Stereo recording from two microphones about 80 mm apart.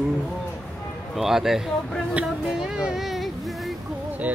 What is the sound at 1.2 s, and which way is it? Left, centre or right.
Speech, centre.